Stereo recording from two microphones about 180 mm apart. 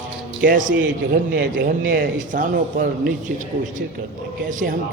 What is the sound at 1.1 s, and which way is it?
Speech, 55° right (ahead or behind).